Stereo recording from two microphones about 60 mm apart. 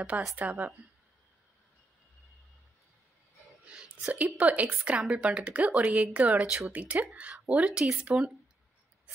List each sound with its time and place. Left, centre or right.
0.4 s speech: right
3.6 s speech: centre